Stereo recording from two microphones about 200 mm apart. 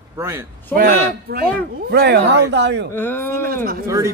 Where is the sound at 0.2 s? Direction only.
15° right (ahead or behind).